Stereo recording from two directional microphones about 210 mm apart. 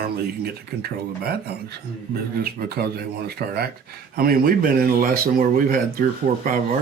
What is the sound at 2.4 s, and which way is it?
Speech, 45° right (ahead or behind).